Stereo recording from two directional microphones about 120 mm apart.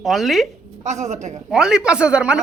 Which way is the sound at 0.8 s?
75° right (ahead or behind).